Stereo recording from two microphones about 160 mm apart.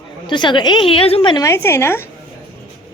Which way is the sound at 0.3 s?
30° left (ahead or behind).